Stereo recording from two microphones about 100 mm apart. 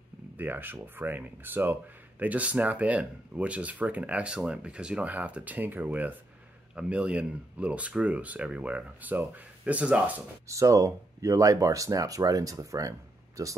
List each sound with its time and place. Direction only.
0.4 s speech: 20° right (ahead or behind)
10.5 s speech: 30° right (ahead or behind)